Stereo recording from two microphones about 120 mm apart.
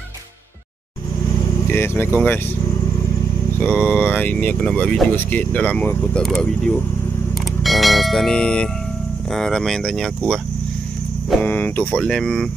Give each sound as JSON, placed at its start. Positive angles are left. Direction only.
{"t": 1.7, "sound": "speech", "side_deg": 20}
{"t": 3.5, "sound": "speech", "side_deg": 15}
{"t": 7.6, "sound": "bell", "side_deg": 0}
{"t": 9.3, "sound": "speech", "side_deg": 5}
{"t": 11.4, "sound": "speech", "side_deg": 15}